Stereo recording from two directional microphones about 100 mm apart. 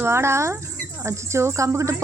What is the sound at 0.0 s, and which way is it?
Speech, 25° right (ahead or behind).